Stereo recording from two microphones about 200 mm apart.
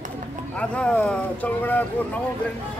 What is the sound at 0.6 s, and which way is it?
Speech, 5° left (ahead or behind).